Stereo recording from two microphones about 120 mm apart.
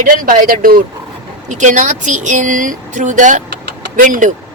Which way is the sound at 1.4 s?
90° right.